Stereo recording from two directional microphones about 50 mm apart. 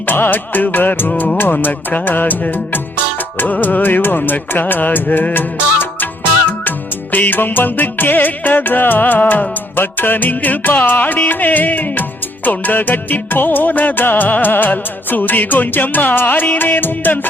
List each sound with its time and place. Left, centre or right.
0.1 s music: left
5.3 s music of bollywood: left
6.7 s music: left